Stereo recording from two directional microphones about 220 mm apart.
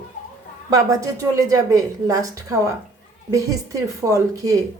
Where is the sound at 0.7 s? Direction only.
15° right (ahead or behind).